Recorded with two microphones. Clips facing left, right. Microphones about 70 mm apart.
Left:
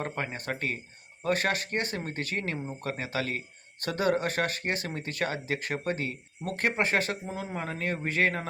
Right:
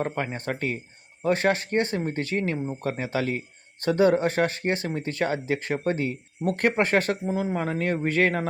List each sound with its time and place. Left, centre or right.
0.0 s speech: right
7.3 s speech: centre
8.0 s speech: right